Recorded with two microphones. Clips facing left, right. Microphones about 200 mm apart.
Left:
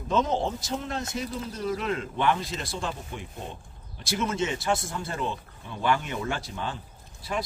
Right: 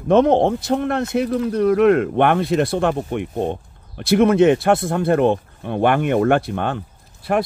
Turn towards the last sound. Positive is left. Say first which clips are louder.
# right 12 dB
turn(degrees=-60)  # may be behind; listen again after turning